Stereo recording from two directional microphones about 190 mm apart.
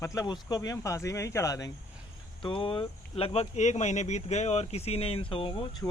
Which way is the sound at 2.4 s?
25° left (ahead or behind).